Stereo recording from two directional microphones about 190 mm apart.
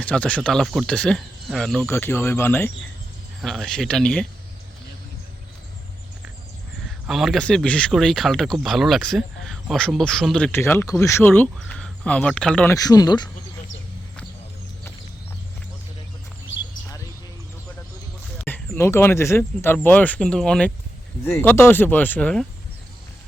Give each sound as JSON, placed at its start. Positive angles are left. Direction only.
{"t": 0.0, "sound": "speech", "side_deg": 5}
{"t": 3.4, "sound": "speech", "side_deg": 0}
{"t": 7.1, "sound": "speech", "side_deg": 0}
{"t": 12.7, "sound": "speech", "side_deg": 20}
{"t": 18.3, "sound": "speech", "side_deg": 10}